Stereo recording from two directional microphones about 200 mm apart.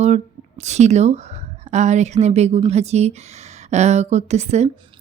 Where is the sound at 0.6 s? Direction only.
35° right (ahead or behind).